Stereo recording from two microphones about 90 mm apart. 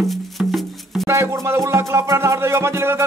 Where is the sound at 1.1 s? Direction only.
35° right (ahead or behind).